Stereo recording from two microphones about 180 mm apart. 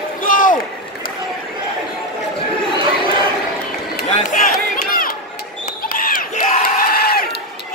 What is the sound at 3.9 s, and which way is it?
Run, 45° left (ahead or behind).